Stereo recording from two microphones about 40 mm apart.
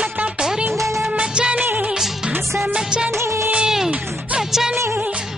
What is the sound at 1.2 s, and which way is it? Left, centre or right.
Music of bollywood, right.